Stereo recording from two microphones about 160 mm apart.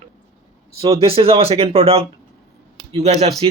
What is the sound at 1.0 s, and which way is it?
Speech, 35° right (ahead or behind).